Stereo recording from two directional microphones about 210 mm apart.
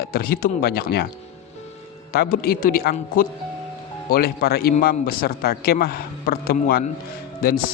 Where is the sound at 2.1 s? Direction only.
45° left (ahead or behind).